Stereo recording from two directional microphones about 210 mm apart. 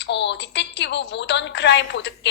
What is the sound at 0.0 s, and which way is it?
A woman's voice, 55° left (ahead or behind).